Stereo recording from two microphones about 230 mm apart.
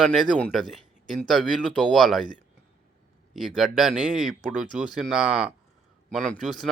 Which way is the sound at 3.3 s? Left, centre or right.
Centre.